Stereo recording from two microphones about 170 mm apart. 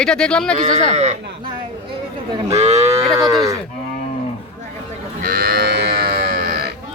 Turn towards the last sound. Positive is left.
turn(degrees=-65)  # may be behind; listen again after turning